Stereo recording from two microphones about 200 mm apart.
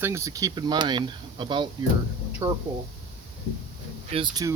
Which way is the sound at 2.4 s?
10° right (ahead or behind).